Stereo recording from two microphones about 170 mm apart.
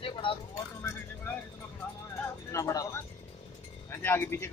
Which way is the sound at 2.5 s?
20° left (ahead or behind).